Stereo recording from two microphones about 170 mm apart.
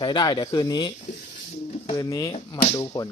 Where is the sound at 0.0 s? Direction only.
25° left (ahead or behind).